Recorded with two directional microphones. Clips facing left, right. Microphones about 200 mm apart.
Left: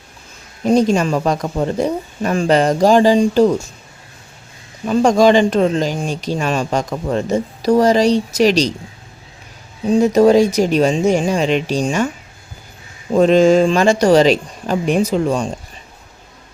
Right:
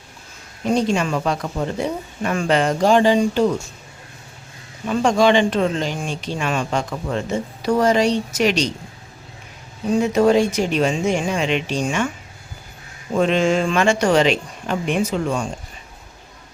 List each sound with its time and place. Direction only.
0.6 s speech: 40° left (ahead or behind)
4.9 s speech: 40° left (ahead or behind)
10.0 s speech: 40° left (ahead or behind)
13.1 s speech: 40° left (ahead or behind)